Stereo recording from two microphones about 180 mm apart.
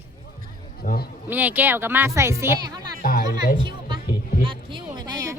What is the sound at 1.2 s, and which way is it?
A woman's voice, 10° right (ahead or behind).